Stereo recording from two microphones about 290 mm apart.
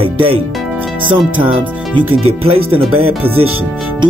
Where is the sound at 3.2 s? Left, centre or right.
Centre.